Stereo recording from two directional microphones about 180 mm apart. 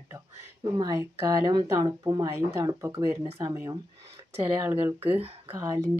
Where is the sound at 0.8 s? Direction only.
20° right (ahead or behind).